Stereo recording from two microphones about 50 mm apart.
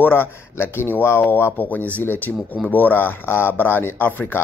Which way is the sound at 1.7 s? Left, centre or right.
Left.